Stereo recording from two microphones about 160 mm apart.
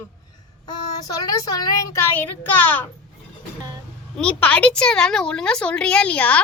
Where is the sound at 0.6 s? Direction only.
25° left (ahead or behind).